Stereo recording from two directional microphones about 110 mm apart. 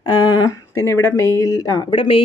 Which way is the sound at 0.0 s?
40° left (ahead or behind).